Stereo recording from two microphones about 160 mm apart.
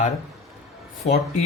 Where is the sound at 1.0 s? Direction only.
40° left (ahead or behind).